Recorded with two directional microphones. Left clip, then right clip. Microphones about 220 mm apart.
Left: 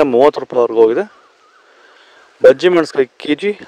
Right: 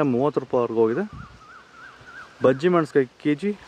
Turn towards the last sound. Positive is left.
turn(degrees=45)  # may be behind; listen again after turning